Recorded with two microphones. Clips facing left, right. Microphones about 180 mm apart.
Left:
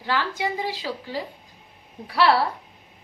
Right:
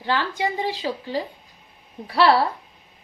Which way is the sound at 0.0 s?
25° right (ahead or behind).